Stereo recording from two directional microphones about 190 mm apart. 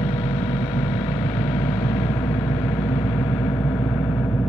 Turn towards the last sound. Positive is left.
turn(degrees=10)  # may be behind; listen again after turning